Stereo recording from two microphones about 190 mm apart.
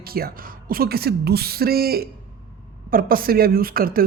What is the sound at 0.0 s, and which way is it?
A woman's voice, 50° right (ahead or behind).